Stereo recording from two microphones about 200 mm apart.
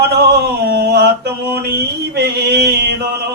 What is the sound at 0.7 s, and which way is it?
Mantra, 55° right (ahead or behind).